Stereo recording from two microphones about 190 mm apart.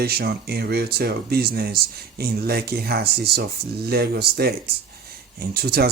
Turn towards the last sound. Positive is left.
turn(degrees=-55)  # may be behind; listen again after turning